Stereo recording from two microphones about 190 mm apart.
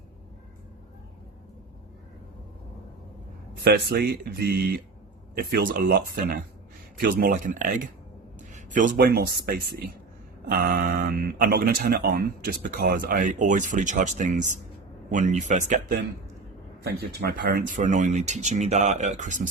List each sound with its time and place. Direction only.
3.6 s speech: 60° right (ahead or behind); by 16.0 s 40° right (ahead or behind)
16.8 s speech: 55° right (ahead or behind); by 19.5 s 40° right (ahead or behind)